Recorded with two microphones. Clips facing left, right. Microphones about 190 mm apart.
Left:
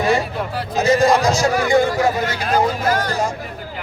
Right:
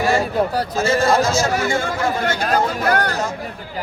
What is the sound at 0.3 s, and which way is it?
Speech, 40° right (ahead or behind).